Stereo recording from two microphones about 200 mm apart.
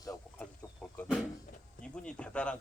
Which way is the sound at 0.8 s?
5° left (ahead or behind).